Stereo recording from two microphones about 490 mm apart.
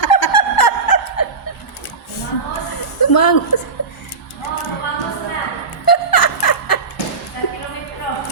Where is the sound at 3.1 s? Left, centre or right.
Left.